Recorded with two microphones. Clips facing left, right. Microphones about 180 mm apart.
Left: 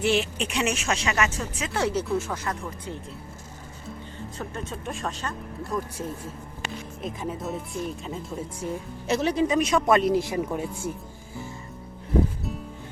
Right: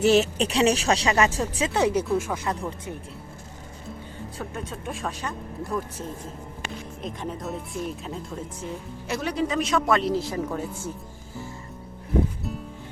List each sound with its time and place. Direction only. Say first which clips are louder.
0.0 s speech: right 5 dB; 40° right (ahead or behind)
1.7 s speech: right 2 dB; 15° right (ahead or behind)
4.4 s speech: even; 5° right (ahead or behind)
7.0 s speech: left 1 dB; 5° left (ahead or behind)
9.0 s speech: left 4 dB; 20° left (ahead or behind)